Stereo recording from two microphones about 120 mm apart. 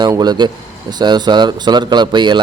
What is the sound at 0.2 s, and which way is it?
A man's voice, 35° right (ahead or behind).